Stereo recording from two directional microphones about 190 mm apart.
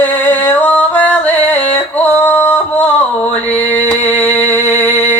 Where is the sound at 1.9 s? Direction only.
10° left (ahead or behind).